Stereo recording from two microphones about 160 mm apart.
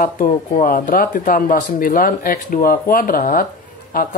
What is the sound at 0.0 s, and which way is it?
Speech, 60° left (ahead or behind).